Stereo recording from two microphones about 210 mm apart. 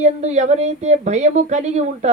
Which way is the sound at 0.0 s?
35° right (ahead or behind).